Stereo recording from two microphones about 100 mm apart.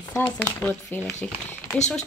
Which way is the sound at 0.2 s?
15° left (ahead or behind).